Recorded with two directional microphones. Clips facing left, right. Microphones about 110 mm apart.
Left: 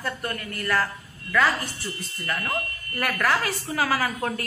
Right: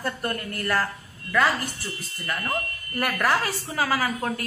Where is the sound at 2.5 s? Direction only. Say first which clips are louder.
Right 1 dB; 5° right (ahead or behind).